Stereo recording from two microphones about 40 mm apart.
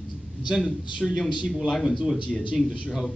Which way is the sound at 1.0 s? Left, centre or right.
Left.